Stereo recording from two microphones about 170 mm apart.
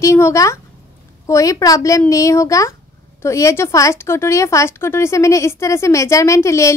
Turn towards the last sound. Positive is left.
turn(degrees=15)  # may be behind; listen again after turning